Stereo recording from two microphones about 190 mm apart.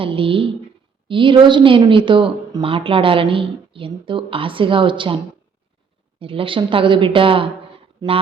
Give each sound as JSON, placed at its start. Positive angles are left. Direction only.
{"t": 0.0, "sound": "a woman's voice", "side_deg": -30}